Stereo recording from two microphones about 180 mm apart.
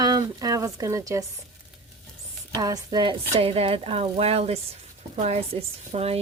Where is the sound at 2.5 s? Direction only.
20° right (ahead or behind).